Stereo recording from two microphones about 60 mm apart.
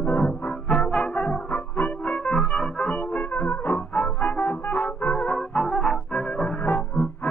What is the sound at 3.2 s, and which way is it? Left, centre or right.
Brass instrument, left.